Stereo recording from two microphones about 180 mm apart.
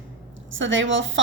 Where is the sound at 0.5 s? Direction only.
90° right.